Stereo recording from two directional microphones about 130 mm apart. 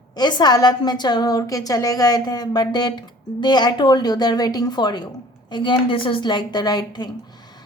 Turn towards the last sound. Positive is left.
turn(degrees=30)  # may be behind; listen again after turning